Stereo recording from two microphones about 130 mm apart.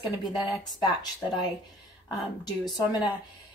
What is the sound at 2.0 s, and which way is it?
A woman's voice, 30° left (ahead or behind).